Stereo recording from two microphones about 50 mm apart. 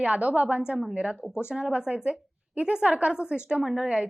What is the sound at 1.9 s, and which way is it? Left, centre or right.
A woman's voice, right.